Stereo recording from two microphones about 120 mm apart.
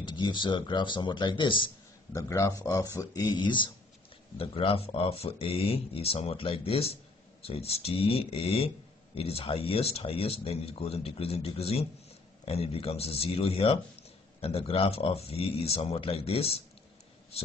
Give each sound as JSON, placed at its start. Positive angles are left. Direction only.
{"t": 0.0, "sound": "speech", "side_deg": 40}
{"t": 2.1, "sound": "speech", "side_deg": 25}